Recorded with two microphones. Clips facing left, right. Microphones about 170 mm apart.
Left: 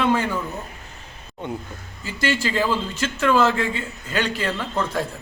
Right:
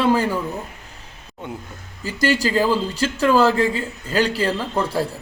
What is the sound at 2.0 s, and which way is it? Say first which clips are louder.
A man's voice: right 4 dB; 40° right (ahead or behind).